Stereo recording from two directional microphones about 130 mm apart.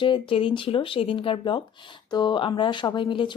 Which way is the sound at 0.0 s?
40° left (ahead or behind).